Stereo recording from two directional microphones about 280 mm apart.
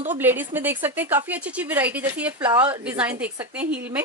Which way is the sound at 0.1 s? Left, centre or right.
Centre.